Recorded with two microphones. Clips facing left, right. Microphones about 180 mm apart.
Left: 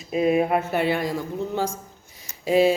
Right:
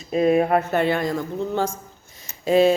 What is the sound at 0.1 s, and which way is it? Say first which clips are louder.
Speech: right 2 dB; 5° left (ahead or behind).